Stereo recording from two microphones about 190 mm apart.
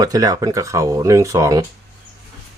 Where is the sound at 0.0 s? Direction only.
20° right (ahead or behind).